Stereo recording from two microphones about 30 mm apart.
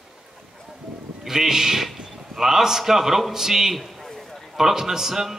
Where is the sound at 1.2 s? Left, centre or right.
Centre.